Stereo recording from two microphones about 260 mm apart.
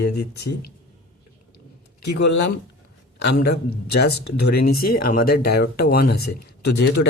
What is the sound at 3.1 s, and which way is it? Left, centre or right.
Speech, left.